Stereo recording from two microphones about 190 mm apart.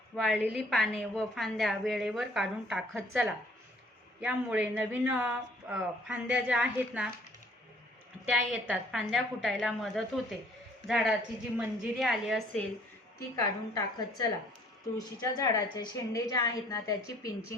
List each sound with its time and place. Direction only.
0.2 s a woman's voice: centre (ahead or behind)
8.3 s a woman's voice: 5° right (ahead or behind)
13.4 s a woman's voice: 20° left (ahead or behind)